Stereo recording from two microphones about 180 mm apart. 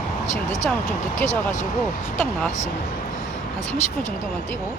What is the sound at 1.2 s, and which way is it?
Speech, 45° left (ahead or behind).